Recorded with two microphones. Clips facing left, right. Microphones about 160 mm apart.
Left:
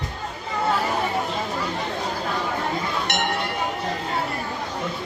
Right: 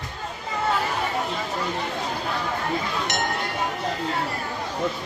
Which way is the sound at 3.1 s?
65° left (ahead or behind).